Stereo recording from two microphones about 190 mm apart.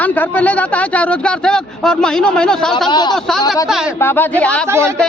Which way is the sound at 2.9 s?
20° left (ahead or behind).